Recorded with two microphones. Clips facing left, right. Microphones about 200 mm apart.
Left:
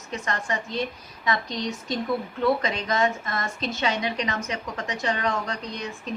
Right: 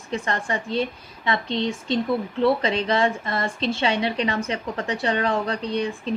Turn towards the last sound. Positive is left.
turn(degrees=-30)  # may be behind; listen again after turning